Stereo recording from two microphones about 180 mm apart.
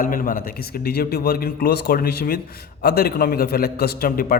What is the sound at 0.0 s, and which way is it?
A man's voice, 50° left (ahead or behind).